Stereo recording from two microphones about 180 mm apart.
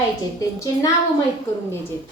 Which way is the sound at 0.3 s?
20° left (ahead or behind).